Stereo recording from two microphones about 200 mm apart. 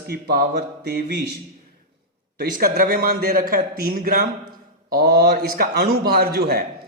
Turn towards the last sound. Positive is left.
turn(degrees=-50)  # may be behind; listen again after turning